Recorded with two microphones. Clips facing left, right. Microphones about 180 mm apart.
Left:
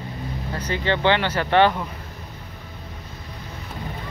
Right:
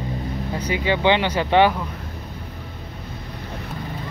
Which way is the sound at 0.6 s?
10° right (ahead or behind).